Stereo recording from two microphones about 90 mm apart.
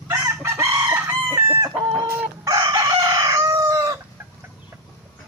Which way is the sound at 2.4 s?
45° right (ahead or behind).